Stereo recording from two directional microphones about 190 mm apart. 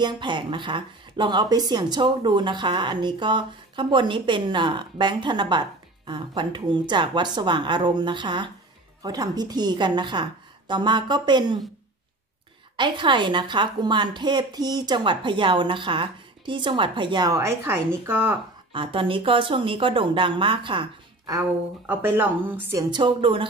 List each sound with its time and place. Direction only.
0.0 s speech: 25° right (ahead or behind)
12.7 s speech: 25° right (ahead or behind)
18.7 s speech: 25° right (ahead or behind); by 22.8 s 10° right (ahead or behind)
22.8 s speech: 25° right (ahead or behind)